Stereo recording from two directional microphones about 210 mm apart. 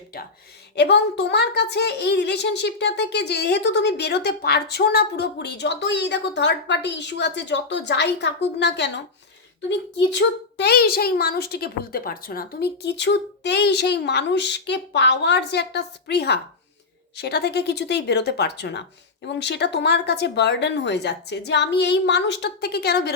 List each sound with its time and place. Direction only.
0.8 s a woman's voice: 55° left (ahead or behind)